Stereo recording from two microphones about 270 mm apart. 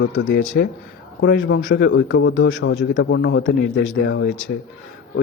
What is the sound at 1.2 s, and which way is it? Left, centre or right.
A man's voice, left.